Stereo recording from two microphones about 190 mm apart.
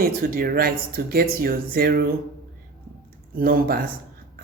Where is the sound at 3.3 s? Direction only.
50° right (ahead or behind).